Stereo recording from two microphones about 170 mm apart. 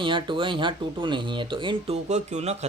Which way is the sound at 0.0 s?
30° right (ahead or behind).